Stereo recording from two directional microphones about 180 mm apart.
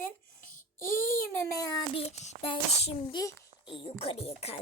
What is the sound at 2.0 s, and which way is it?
A child's voice, 40° left (ahead or behind).